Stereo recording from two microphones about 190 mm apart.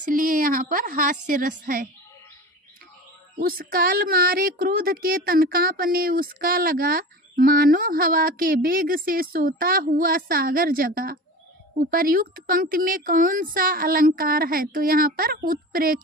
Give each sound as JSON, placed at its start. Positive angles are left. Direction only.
{"t": 0.0, "sound": "speech", "side_deg": -45}
{"t": 3.4, "sound": "speech", "side_deg": -50}